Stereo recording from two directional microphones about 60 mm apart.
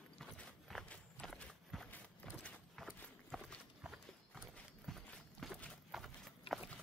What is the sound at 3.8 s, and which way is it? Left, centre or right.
Horse, centre.